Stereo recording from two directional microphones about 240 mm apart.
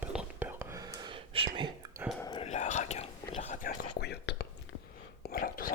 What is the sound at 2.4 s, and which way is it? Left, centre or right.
Whispering, left.